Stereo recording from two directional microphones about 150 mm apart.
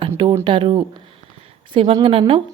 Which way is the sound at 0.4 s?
35° right (ahead or behind).